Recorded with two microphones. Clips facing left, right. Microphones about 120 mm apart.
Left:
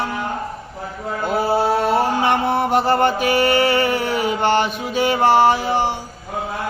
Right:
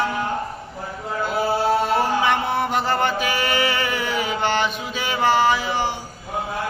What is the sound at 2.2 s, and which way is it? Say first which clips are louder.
Music: left 3 dB; 50° left (ahead or behind).